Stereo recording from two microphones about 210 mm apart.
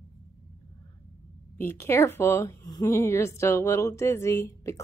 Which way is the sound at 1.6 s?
10° left (ahead or behind).